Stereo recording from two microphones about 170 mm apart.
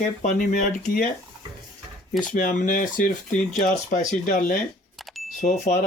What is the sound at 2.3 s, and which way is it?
Speech, 50° left (ahead or behind).